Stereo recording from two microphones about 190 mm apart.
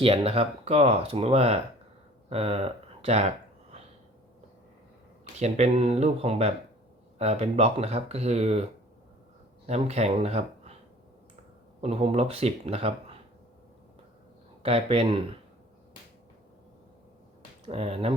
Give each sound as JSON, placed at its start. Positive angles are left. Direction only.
{"t": 0.0, "sound": "speech", "side_deg": -30}
{"t": 5.4, "sound": "speech", "side_deg": -35}
{"t": 9.6, "sound": "speech", "side_deg": -35}
{"t": 11.8, "sound": "speech", "side_deg": -30}
{"t": 14.6, "sound": "speech", "side_deg": -30}
{"t": 17.7, "sound": "speech", "side_deg": -30}